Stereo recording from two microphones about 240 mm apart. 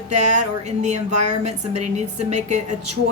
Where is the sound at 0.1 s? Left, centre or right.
Right.